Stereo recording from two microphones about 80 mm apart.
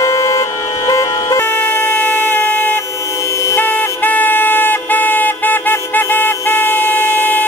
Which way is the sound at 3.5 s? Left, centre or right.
Left.